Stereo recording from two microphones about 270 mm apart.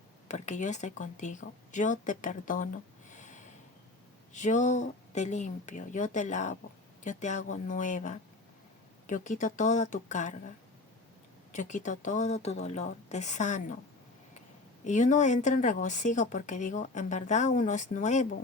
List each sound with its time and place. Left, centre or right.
0.3 s speech: left
3.1 s a sound: left
4.4 s speech: left
11.5 s speech: left
14.8 s speech: left